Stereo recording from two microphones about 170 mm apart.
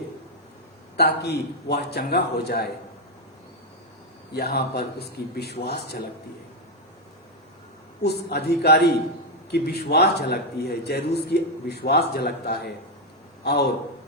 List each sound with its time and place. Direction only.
0.9 s a man's voice: 75° left (ahead or behind)
4.4 s a man's voice: 70° left (ahead or behind)
8.0 s a man's voice: 75° left (ahead or behind)